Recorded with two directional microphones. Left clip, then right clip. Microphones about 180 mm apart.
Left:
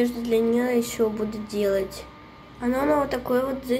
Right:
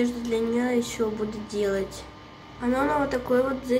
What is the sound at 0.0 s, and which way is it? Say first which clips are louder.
A woman's voice: left 4 dB; 20° left (ahead or behind).